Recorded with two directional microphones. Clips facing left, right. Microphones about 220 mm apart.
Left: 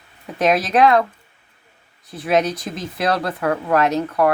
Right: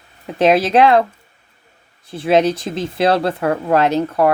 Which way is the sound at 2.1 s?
30° right (ahead or behind).